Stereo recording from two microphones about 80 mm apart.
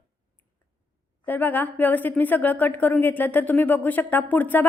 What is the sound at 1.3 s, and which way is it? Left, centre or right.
A woman's voice, left.